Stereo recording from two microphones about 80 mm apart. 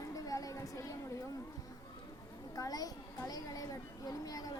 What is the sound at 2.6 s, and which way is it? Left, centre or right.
Speech, left.